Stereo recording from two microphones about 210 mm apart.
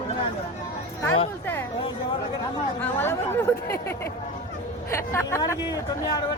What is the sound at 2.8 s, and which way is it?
Speech, 10° left (ahead or behind).